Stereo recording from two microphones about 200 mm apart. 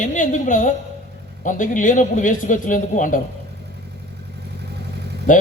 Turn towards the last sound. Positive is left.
turn(degrees=40)  # may be behind; listen again after turning